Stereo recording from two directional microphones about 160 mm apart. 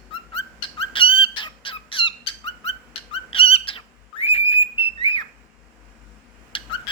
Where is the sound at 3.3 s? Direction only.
35° left (ahead or behind).